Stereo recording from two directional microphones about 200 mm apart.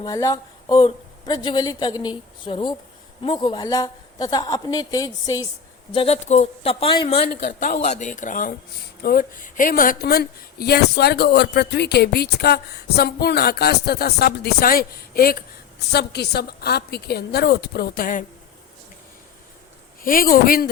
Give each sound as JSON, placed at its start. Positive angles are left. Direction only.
{"t": 0.0, "sound": "a woman's voice", "side_deg": 15}
{"t": 5.9, "sound": "a woman's voice", "side_deg": 30}
{"t": 7.2, "sound": "speech", "side_deg": 55}
{"t": 7.9, "sound": "speech", "side_deg": 35}
{"t": 20.0, "sound": "speech", "side_deg": 45}